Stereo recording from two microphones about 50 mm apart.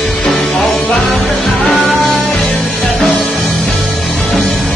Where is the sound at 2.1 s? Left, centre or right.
Centre.